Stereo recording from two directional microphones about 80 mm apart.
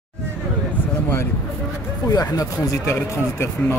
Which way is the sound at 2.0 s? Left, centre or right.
Left.